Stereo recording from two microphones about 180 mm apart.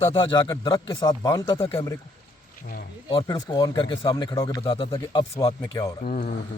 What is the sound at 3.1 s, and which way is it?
Speech, 30° left (ahead or behind).